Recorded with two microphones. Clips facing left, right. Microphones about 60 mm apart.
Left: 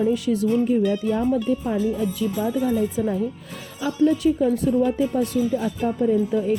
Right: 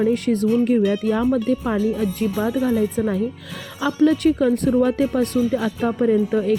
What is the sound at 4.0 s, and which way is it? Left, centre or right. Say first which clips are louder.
Speech: right 2 dB; right.